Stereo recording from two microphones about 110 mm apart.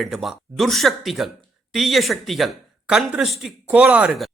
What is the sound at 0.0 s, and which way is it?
A man's voice, centre (ahead or behind).